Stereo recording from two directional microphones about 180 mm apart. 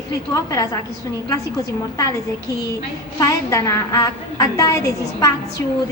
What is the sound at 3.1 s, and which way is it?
A woman's voice, 20° left (ahead or behind).